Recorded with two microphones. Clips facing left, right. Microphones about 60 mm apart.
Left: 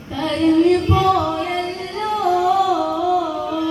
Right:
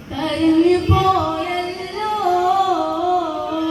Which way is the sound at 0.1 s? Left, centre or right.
Centre.